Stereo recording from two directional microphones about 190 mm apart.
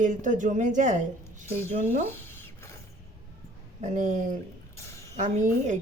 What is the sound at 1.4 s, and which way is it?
Speech, 15° left (ahead or behind).